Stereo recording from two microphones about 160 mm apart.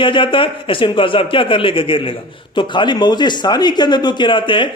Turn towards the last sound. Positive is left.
turn(degrees=30)  # may be behind; listen again after turning